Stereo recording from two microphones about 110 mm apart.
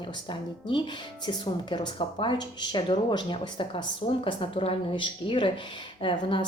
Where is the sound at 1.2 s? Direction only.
40° left (ahead or behind).